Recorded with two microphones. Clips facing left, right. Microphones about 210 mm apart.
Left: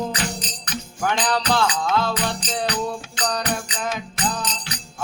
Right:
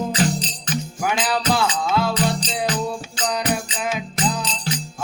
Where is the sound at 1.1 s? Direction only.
10° right (ahead or behind).